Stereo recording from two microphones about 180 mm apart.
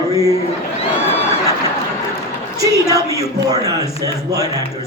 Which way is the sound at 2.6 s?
20° right (ahead or behind).